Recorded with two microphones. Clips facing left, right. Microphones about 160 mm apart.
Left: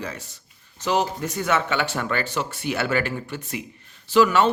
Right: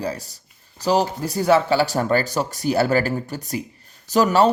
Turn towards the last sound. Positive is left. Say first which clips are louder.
# right 1 dB
turn(degrees=-40)  # may be behind; listen again after turning